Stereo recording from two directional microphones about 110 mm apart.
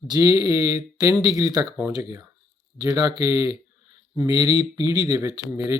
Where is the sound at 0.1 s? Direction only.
35° right (ahead or behind).